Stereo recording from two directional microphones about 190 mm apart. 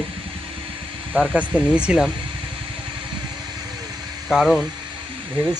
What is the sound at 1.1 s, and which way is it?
Speech, 5° right (ahead or behind).